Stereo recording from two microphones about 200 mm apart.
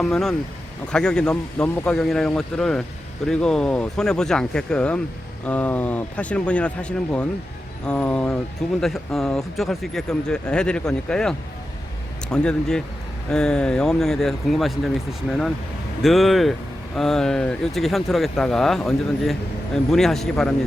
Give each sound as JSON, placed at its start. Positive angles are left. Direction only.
{"t": 0.0, "sound": "speech", "side_deg": 0}